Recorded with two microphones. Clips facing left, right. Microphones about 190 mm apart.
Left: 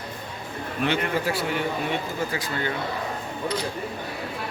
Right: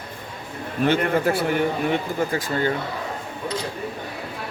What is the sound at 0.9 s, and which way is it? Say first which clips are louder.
Speech: right 6 dB; 55° right (ahead or behind).